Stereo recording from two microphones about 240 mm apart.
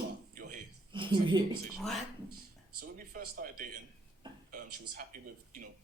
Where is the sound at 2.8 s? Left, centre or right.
Right.